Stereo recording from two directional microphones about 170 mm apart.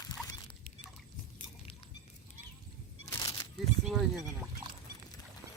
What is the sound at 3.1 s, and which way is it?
Single-lens reflex camera, 20° left (ahead or behind).